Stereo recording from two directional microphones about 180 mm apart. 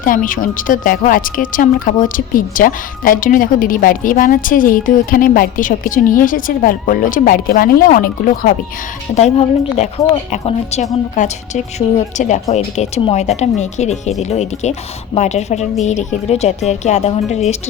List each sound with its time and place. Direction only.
0.0 s speech: 50° left (ahead or behind)
9.1 s speech: 40° left (ahead or behind)